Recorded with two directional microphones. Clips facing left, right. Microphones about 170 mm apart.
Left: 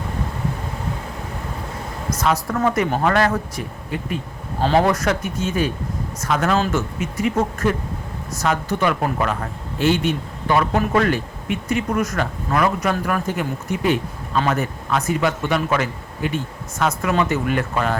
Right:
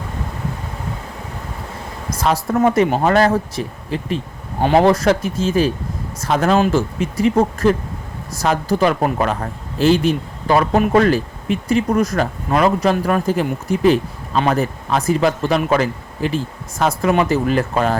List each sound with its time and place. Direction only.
2.1 s speech: 30° right (ahead or behind)
2.6 s speech: 20° right (ahead or behind)
4.6 s speech: 20° right (ahead or behind)
4.9 s a man's voice: 30° right (ahead or behind)